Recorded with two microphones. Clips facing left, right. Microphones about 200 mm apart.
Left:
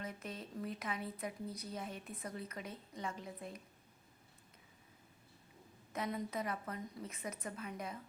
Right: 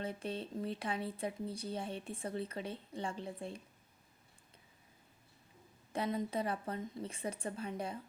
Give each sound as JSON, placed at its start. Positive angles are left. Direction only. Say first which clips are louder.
{"t": 0.0, "sound": "speech", "louder": "right 6 dB", "side_deg": -30}
{"t": 5.9, "sound": "a woman's voice", "louder": "right 4 dB", "side_deg": -30}